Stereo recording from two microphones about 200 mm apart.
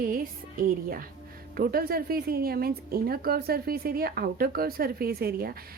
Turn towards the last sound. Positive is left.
turn(degrees=-50)  # may be behind; listen again after turning